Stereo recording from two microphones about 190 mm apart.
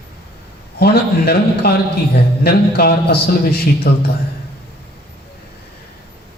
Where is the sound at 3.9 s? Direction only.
55° left (ahead or behind).